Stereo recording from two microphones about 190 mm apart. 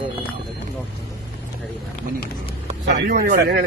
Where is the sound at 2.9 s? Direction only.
55° right (ahead or behind).